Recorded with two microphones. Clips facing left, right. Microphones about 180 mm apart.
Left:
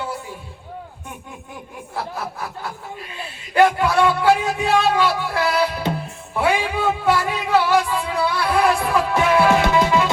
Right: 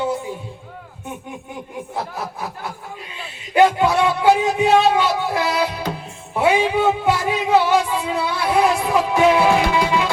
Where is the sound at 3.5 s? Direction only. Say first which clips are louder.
Right 2 dB; 20° right (ahead or behind).